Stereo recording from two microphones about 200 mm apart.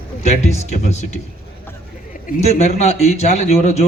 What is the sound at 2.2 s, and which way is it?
A man's voice, 35° left (ahead or behind).